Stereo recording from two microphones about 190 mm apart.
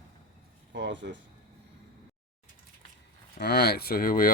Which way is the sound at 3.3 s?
55° left (ahead or behind).